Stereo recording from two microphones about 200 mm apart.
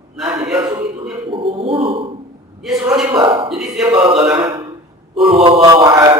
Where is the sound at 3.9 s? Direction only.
20° right (ahead or behind).